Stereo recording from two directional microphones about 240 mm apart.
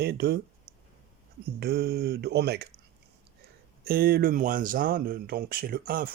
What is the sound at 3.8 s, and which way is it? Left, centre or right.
Speech, right.